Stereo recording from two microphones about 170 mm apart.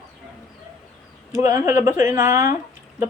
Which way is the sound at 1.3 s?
15° right (ahead or behind).